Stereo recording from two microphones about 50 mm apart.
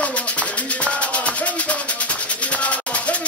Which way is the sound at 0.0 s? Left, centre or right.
Left.